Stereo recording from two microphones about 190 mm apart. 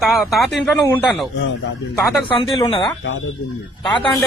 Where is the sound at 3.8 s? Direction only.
25° left (ahead or behind).